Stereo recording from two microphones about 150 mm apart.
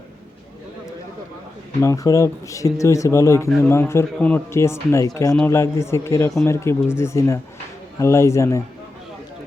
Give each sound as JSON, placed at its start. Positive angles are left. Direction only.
{"t": 1.8, "sound": "speech", "side_deg": 20}